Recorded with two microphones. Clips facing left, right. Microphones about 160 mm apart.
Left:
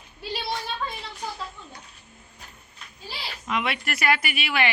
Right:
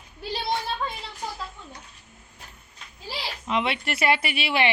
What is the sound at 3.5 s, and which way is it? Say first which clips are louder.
A woman's voice: right 2 dB; 25° right (ahead or behind).